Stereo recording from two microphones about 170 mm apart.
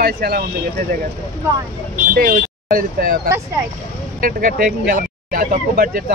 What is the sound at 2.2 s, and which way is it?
Speech, 65° right (ahead or behind).